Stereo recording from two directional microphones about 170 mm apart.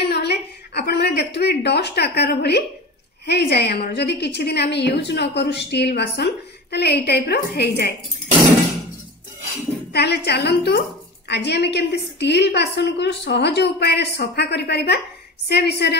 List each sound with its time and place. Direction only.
0.1 s a sound: 75° left (ahead or behind)
3.3 s a woman's voice: 80° left
9.9 s a woman's voice: 75° left (ahead or behind)